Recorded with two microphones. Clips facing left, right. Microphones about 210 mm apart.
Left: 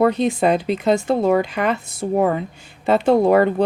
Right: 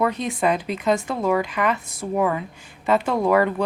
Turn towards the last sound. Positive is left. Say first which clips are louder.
# left 5 dB
turn(degrees=30)  # may be behind; listen again after turning